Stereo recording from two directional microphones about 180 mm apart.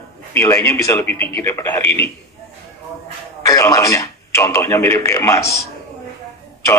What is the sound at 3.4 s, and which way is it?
A man's voice, 20° left (ahead or behind).